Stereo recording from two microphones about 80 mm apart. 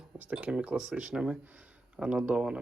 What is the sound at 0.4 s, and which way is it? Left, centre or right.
Speech, centre.